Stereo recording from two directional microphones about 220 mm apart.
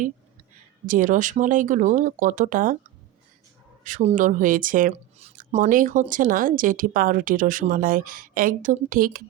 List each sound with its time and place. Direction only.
0.9 s speech: 35° right (ahead or behind)
3.8 s speech: 35° right (ahead or behind)